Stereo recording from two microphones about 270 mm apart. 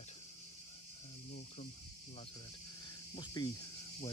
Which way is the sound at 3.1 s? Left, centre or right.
Centre.